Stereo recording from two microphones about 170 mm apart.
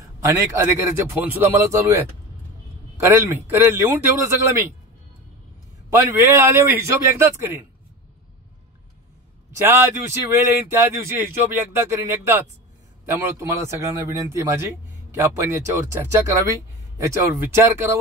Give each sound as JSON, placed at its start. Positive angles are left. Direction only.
{"t": 0.2, "sound": "a man's voice", "side_deg": -15}
{"t": 5.9, "sound": "a man's voice", "side_deg": -15}
{"t": 10.3, "sound": "a man's voice", "side_deg": -15}